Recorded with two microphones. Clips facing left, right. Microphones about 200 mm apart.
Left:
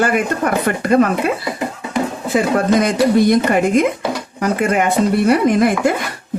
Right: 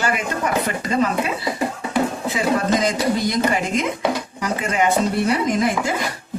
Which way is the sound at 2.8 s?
60° left (ahead or behind).